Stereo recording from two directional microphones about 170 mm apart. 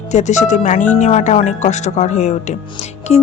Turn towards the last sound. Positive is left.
turn(degrees=35)  # may be behind; listen again after turning